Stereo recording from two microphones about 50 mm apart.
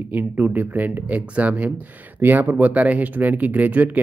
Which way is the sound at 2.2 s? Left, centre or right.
Right.